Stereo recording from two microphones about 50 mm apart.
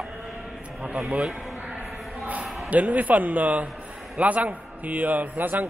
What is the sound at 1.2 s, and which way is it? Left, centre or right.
Speech, centre.